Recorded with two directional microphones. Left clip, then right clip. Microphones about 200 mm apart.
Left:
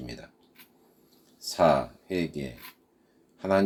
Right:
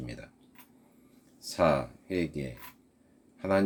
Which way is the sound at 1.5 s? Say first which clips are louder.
Left 4 dB; 40° right (ahead or behind).